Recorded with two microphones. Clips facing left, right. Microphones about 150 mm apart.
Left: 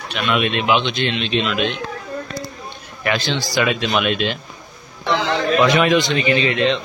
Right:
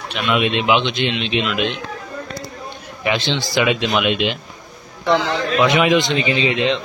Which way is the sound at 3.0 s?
20° right (ahead or behind).